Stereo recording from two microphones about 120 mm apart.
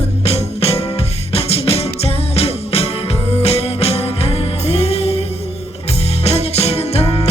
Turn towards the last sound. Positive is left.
turn(degrees=60)  # may be behind; listen again after turning